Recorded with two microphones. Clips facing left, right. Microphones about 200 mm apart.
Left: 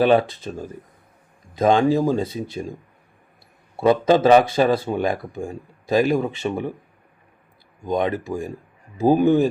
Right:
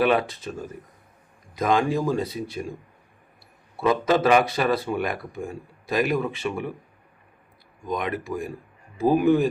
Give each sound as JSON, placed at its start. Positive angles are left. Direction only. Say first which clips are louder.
{"t": 0.0, "sound": "speech", "louder": "left 5 dB", "side_deg": 30}
{"t": 1.5, "sound": "speech", "louder": "left 5 dB", "side_deg": 25}
{"t": 3.8, "sound": "speech", "louder": "left 5 dB", "side_deg": 30}
{"t": 7.9, "sound": "speech", "louder": "left 5 dB", "side_deg": 30}